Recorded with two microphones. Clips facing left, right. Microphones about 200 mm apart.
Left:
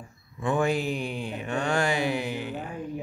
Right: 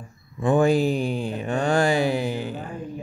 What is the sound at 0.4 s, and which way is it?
Mantra, 35° right (ahead or behind).